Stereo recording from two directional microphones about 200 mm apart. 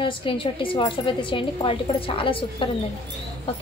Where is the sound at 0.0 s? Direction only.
25° left (ahead or behind).